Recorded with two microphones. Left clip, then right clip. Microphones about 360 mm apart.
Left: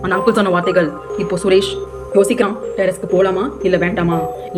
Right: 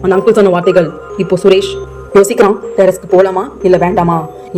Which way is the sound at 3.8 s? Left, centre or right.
Right.